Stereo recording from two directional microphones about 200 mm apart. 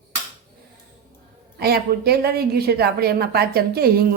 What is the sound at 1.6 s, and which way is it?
A woman's voice, 50° right (ahead or behind).